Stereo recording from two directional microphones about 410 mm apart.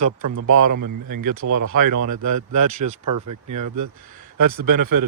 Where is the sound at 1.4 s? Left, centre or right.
Right.